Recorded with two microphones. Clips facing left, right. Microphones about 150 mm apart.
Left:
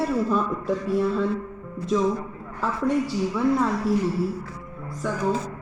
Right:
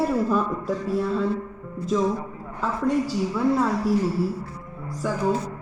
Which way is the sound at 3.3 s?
Centre (ahead or behind).